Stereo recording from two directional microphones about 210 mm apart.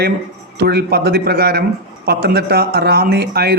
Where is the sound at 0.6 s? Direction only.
50° right (ahead or behind).